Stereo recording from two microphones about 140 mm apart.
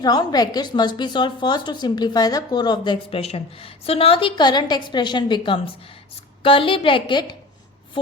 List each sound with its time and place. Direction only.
0.0 s a woman's voice: 30° left (ahead or behind)